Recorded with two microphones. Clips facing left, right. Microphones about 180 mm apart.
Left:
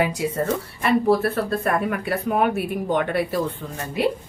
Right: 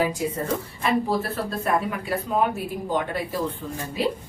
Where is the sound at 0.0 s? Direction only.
70° left (ahead or behind).